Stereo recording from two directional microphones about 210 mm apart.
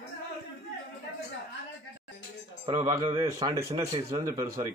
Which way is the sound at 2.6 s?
20° right (ahead or behind).